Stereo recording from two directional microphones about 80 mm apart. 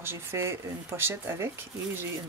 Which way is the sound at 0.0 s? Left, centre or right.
Right.